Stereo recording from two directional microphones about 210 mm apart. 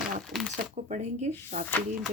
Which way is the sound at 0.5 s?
35° right (ahead or behind).